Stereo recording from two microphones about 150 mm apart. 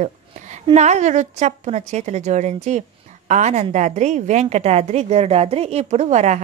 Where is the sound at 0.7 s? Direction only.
50° right (ahead or behind).